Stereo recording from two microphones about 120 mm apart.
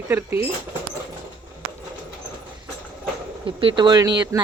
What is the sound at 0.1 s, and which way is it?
Speech, 15° right (ahead or behind).